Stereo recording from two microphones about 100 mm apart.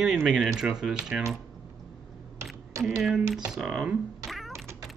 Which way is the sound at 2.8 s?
25° right (ahead or behind).